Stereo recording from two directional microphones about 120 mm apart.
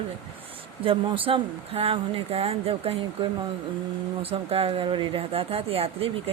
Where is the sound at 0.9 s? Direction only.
45° right (ahead or behind).